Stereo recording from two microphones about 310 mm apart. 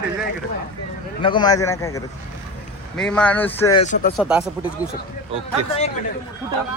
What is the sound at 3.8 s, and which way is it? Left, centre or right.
Speech, left.